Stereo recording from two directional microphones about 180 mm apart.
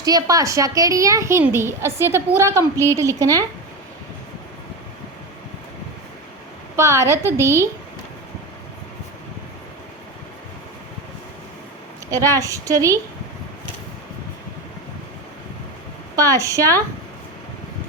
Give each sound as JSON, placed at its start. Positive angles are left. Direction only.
{"t": 0.0, "sound": "a woman's voice", "side_deg": -20}
{"t": 6.7, "sound": "a woman's voice", "side_deg": -15}
{"t": 12.4, "sound": "a woman's voice", "side_deg": -20}
{"t": 16.3, "sound": "a woman's voice", "side_deg": -15}